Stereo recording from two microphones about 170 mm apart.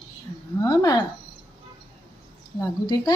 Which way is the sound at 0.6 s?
20° left (ahead or behind).